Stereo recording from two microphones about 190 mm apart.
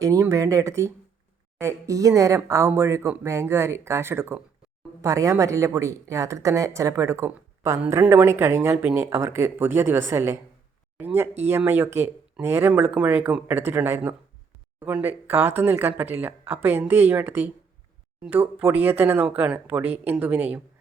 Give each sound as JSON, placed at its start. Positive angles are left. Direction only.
{"t": 0.0, "sound": "speech", "side_deg": -15}